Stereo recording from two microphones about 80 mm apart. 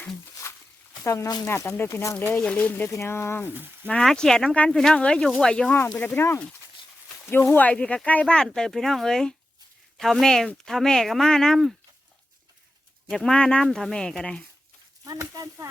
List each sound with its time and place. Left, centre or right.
1.0 s speech: left
2.4 s speech: centre
2.9 s speech: left
4.0 s speech: centre
6.0 s speech: left; by 11.7 s centre
13.1 s speech: centre
15.0 s speech: right